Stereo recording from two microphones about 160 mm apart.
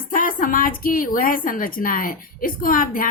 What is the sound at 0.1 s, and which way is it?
Speech, 55° left (ahead or behind).